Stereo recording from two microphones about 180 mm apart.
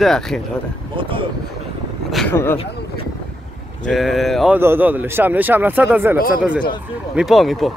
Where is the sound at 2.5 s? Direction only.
30° left (ahead or behind).